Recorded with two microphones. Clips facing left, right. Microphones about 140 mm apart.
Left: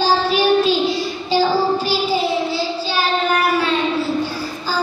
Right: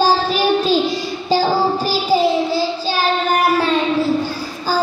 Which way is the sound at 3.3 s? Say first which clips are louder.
Right 2 dB; 45° right (ahead or behind).